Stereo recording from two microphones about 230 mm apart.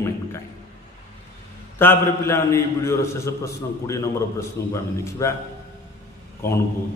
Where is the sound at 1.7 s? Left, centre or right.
Centre.